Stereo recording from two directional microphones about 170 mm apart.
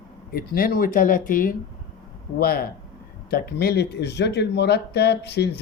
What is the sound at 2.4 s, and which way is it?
Speech, 65° left (ahead or behind).